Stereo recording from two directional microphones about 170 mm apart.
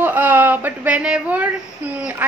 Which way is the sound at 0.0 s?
10° right (ahead or behind).